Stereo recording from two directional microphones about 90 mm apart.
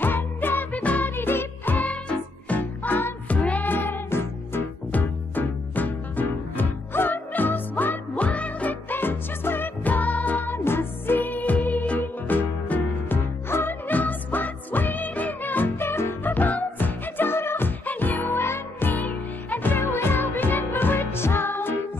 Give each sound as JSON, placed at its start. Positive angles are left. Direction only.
{"t": 0.0, "sound": "music for children", "side_deg": 20}